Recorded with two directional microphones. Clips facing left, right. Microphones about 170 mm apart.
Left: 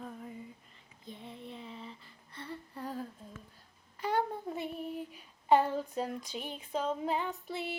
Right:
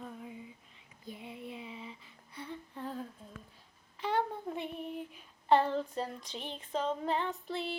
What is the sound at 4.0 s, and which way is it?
Child singing, 10° left (ahead or behind).